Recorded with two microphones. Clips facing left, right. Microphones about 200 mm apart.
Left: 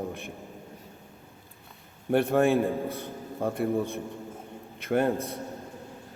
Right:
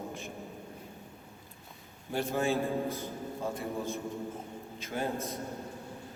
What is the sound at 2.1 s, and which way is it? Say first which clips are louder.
A man's voice: left 8 dB; 60° left (ahead or behind).